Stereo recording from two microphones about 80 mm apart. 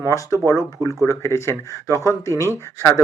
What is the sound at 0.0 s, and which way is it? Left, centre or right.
Speech, left.